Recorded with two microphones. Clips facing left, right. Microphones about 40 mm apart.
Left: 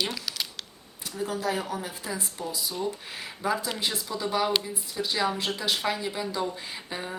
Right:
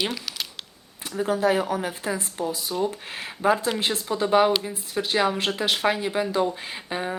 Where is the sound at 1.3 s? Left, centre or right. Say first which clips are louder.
Right 8 dB; right.